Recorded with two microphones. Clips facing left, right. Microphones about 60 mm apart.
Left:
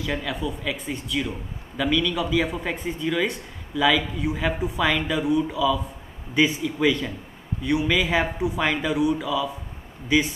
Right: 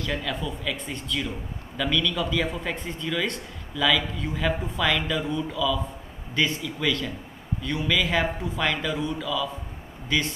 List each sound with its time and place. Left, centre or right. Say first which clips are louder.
0.0 s speech: left 2 dB; centre